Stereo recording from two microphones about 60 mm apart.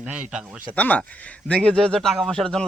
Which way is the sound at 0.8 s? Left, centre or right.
Left.